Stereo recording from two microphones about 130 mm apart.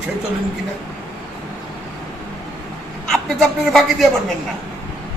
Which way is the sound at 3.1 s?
5° left (ahead or behind).